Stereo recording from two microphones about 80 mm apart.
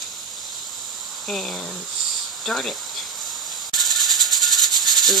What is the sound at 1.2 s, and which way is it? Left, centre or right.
Speech, centre.